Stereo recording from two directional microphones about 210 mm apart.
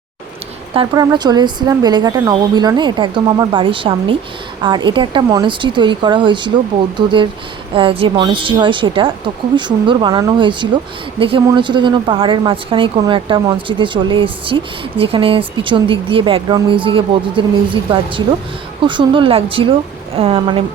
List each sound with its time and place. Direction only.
0.7 s a woman's voice: 25° right (ahead or behind)